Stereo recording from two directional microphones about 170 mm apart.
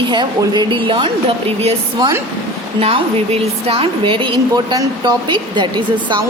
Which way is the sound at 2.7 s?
35° right (ahead or behind).